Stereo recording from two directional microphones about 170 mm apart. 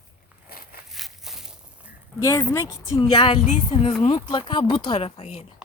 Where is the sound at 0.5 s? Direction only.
60° left (ahead or behind).